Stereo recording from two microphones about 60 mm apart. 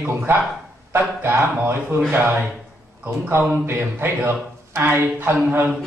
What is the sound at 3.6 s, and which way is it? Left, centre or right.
A woman's voice, right.